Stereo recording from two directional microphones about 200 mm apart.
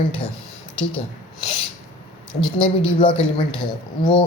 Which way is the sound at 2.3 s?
5° left (ahead or behind).